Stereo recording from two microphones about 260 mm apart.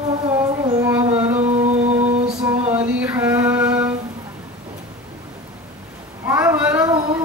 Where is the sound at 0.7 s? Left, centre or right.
Centre.